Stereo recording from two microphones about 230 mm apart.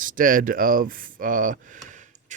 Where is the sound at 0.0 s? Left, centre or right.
Right.